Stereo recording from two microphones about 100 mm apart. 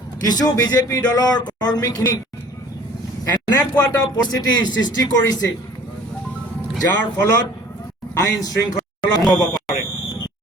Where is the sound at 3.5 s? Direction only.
30° left (ahead or behind).